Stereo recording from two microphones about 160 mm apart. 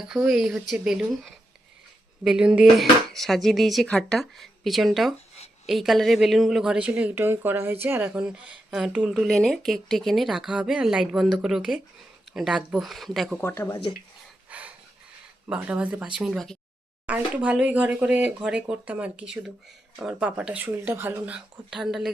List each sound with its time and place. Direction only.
0.0 s a woman's voice: 5° right (ahead or behind)
13.4 s speech: 15° left (ahead or behind)
14.5 s a sound: 10° right (ahead or behind)
15.4 s speech: 10° right (ahead or behind)
21.3 s a woman's voice: 5° right (ahead or behind)